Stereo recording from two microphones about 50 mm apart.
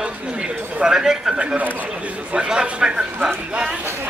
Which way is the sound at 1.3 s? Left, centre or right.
Right.